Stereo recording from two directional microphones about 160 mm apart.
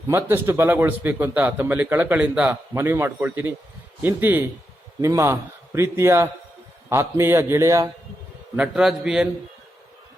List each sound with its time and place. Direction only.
0.1 s a man's voice: 15° right (ahead or behind)
8.5 s a man's voice: 5° right (ahead or behind)